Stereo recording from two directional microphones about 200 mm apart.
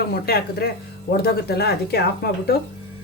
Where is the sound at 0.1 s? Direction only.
50° left (ahead or behind).